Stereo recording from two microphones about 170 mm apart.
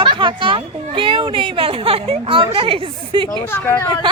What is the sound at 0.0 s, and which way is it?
Speech, 30° right (ahead or behind).